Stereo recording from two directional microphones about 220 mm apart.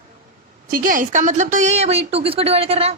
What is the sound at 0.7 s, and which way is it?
A woman's voice, 40° right (ahead or behind).